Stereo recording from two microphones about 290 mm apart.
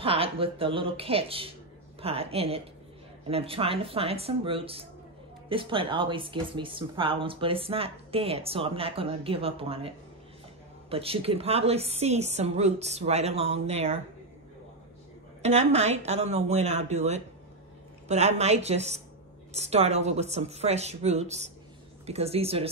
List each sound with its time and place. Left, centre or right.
0.0 s speech: centre
15.4 s speech: right